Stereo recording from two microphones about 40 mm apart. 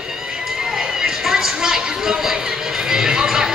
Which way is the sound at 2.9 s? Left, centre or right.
Centre.